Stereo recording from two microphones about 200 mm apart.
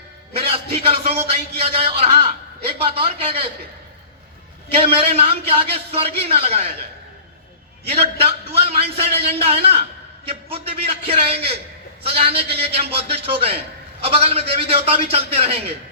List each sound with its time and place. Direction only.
0.3 s a man's voice: 30° right (ahead or behind)
4.8 s a man's voice: 30° right (ahead or behind)
7.9 s a man's voice: 30° right (ahead or behind)